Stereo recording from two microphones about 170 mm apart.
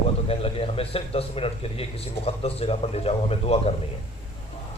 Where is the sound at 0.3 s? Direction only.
35° left (ahead or behind).